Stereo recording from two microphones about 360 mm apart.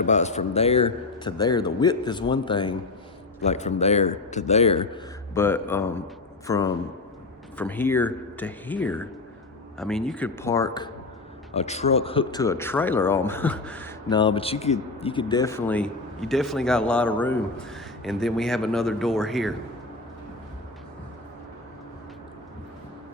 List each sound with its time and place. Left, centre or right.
0.0 s a man's voice: centre